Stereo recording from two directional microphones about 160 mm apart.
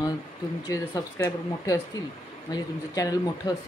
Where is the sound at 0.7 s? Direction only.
20° left (ahead or behind).